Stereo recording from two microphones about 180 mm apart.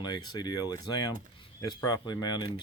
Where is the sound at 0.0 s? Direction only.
25° left (ahead or behind).